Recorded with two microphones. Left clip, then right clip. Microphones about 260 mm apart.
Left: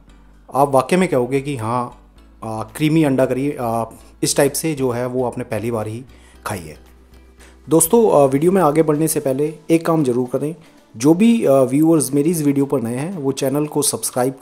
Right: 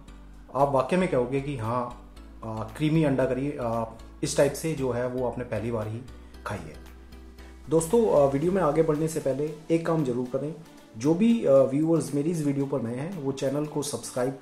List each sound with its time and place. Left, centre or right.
0.5 s speech: left
7.6 s speech: left